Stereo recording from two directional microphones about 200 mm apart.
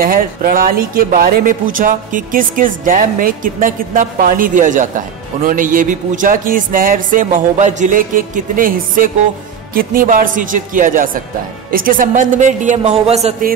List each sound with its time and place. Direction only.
0.0 s a woman's voice: 45° right (ahead or behind)